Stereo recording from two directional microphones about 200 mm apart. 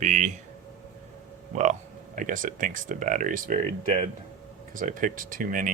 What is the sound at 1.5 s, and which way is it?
Speech, 40° right (ahead or behind).